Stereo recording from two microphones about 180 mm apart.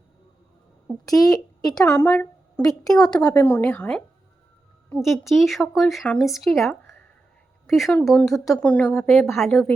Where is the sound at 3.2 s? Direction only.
15° left (ahead or behind).